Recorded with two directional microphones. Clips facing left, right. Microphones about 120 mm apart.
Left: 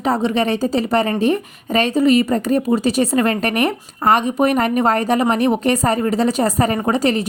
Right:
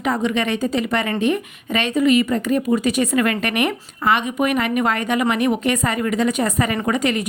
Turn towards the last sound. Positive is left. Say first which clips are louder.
# left 3 dB
turn(degrees=35)  # may be behind; listen again after turning